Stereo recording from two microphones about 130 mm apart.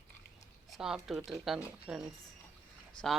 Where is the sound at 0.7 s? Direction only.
5° right (ahead or behind).